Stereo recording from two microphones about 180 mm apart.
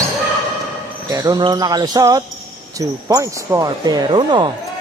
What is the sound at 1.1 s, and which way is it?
Speech, 20° right (ahead or behind).